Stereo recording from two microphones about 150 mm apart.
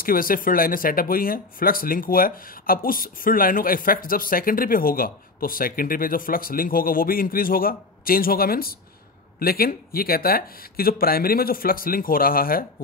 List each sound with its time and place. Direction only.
0.0 s speech: 70° left (ahead or behind)